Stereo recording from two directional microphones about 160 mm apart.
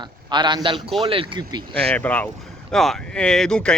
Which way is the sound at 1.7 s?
5° left (ahead or behind).